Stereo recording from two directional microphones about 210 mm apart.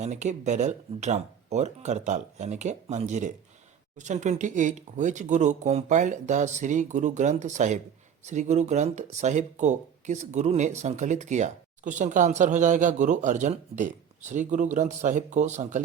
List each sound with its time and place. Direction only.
0.0 s speech: 35° right (ahead or behind)